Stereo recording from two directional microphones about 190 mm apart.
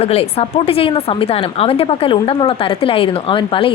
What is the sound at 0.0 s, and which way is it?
A woman's voice, 30° left (ahead or behind).